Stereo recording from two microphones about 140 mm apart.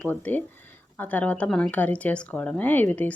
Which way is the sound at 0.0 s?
10° left (ahead or behind).